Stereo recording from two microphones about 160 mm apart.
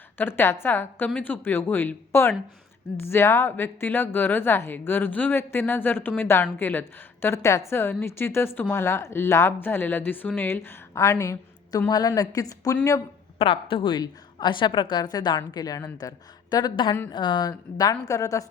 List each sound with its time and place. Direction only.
0.2 s a woman's voice: 15° left (ahead or behind)
13.4 s a woman's voice: 35° left (ahead or behind)